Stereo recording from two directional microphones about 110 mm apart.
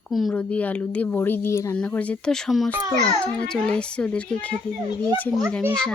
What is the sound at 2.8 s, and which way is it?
Speech, 35° right (ahead or behind).